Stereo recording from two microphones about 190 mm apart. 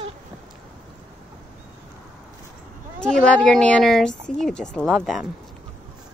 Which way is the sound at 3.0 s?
5° left (ahead or behind).